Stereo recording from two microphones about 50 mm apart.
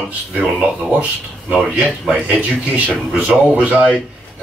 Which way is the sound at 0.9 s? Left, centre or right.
Right.